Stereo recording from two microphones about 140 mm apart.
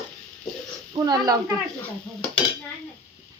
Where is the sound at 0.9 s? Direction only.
30° right (ahead or behind).